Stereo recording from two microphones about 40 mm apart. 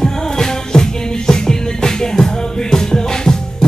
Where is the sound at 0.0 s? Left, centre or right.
Centre.